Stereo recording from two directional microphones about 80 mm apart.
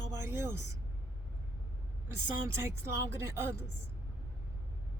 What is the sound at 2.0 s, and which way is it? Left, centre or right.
Speech, right.